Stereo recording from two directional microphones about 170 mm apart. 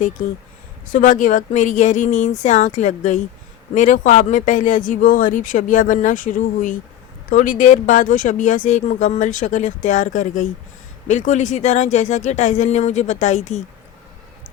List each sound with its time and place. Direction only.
0.9 s speech: 50° left (ahead or behind)